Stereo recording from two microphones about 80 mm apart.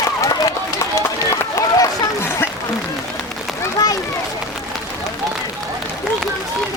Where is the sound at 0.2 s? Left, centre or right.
Left.